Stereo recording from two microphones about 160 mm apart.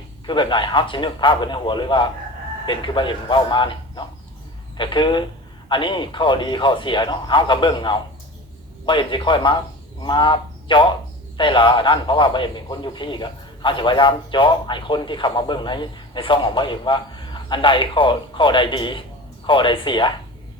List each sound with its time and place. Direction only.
0.3 s a man's voice: 30° left (ahead or behind)